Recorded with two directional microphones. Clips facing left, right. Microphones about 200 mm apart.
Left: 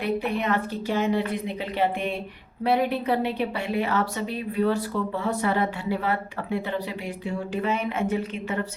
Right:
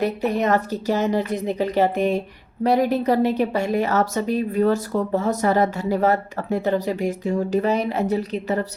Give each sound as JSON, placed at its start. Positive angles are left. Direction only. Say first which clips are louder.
{"t": 0.0, "sound": "a woman's voice", "louder": "right 5 dB", "side_deg": -40}